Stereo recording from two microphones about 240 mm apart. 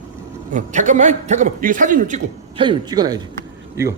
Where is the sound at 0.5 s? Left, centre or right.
Right.